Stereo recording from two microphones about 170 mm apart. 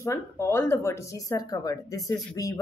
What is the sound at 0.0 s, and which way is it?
Speech, 15° left (ahead or behind).